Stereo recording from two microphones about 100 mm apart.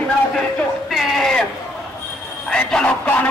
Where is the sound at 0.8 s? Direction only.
Centre (ahead or behind).